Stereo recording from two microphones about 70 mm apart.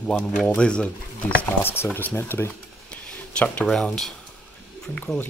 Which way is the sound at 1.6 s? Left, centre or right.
Left.